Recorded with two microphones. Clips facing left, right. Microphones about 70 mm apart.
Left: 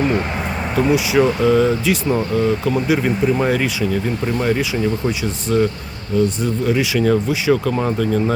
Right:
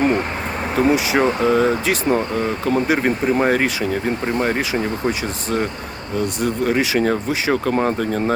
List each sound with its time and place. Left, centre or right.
0.8 s speech: right
3.2 s speech: right
3.5 s speech: right